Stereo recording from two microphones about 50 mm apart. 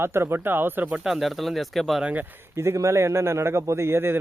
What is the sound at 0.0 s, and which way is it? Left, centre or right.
Speech, right.